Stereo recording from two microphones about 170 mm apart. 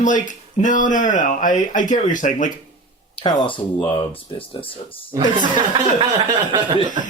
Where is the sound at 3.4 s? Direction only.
30° left (ahead or behind).